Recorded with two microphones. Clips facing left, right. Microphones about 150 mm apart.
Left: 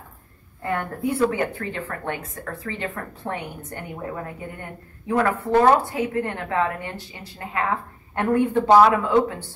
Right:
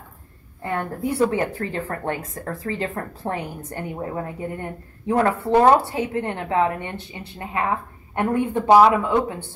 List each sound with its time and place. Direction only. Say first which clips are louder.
0.7 s a woman's voice: right 2 dB; 30° right (ahead or behind)